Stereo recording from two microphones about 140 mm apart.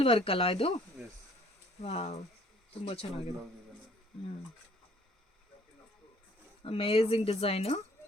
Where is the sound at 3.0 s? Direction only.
45° left (ahead or behind).